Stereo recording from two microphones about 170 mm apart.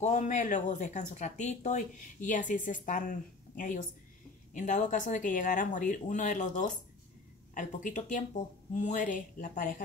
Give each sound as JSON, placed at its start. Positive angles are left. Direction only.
{"t": 0.0, "sound": "speech", "side_deg": 45}